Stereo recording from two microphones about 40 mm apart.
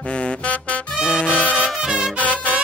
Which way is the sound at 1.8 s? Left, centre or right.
Right.